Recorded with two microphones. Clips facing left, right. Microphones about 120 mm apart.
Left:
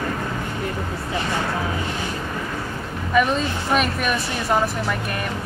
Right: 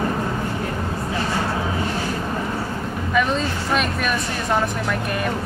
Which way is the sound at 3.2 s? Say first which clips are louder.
Left 2 dB; 5° left (ahead or behind).